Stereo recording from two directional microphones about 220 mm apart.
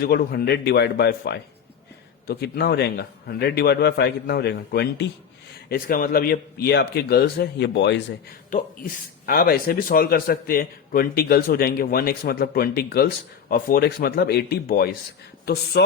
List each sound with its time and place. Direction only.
0.0 s speech: 45° left (ahead or behind)
8.4 s speech: 40° left (ahead or behind)